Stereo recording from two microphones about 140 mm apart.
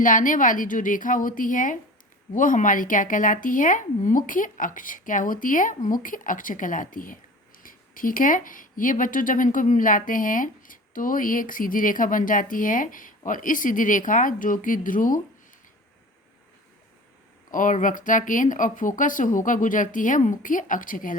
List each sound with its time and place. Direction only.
0.0 s speech: 70° left (ahead or behind)
17.5 s speech: 70° left (ahead or behind)